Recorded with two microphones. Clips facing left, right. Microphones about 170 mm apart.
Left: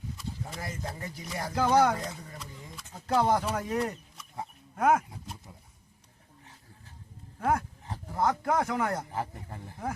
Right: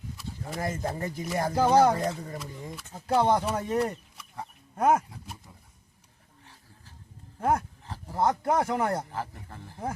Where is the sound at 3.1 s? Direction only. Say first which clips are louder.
Right 2 dB; 25° right (ahead or behind).